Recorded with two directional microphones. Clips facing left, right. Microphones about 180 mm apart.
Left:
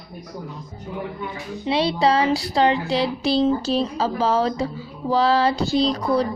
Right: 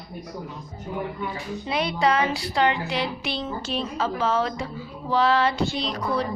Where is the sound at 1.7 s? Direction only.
30° left (ahead or behind).